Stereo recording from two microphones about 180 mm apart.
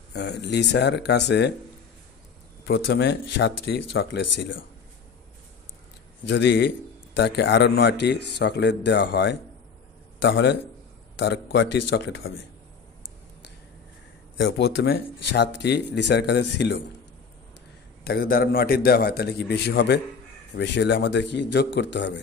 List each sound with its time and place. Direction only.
0.1 s speech: 70° left (ahead or behind)
2.6 s speech: 65° left (ahead or behind); by 4.6 s 90° left
6.2 s a man's voice: 80° left
11.1 s speech: 70° left (ahead or behind); by 12.3 s 85° left
14.4 s speech: 70° left (ahead or behind)
18.0 s a man's voice: 55° left (ahead or behind); by 22.2 s 75° left (ahead or behind)